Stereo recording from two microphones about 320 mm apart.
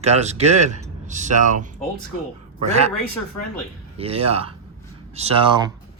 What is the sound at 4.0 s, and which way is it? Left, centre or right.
Speech, centre.